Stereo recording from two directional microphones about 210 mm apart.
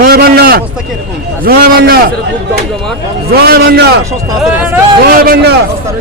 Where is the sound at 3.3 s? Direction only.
50° right (ahead or behind).